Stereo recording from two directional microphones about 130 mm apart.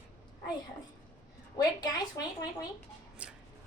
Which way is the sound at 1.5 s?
30° left (ahead or behind).